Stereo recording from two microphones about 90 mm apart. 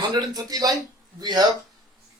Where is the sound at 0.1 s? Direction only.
50° right (ahead or behind).